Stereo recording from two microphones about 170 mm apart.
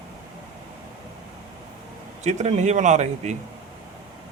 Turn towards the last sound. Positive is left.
turn(degrees=-45)  # may be behind; listen again after turning